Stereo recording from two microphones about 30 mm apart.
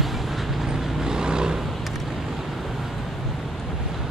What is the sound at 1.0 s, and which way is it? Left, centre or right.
Vehicle, right.